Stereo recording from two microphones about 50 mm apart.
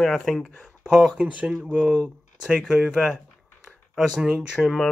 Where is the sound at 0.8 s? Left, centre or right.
Centre.